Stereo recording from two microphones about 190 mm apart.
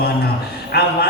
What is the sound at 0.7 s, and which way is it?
Speech, 55° left (ahead or behind).